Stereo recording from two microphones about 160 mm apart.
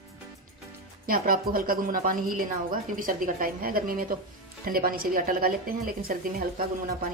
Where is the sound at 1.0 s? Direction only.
65° right (ahead or behind).